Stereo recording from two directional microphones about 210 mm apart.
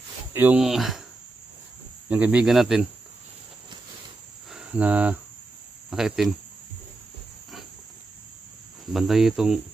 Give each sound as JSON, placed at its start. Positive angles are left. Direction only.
{"t": 0.3, "sound": "cricket", "side_deg": -10}
{"t": 2.0, "sound": "cricket", "side_deg": -5}
{"t": 4.5, "sound": "cricket", "side_deg": -5}
{"t": 8.9, "sound": "cricket", "side_deg": 0}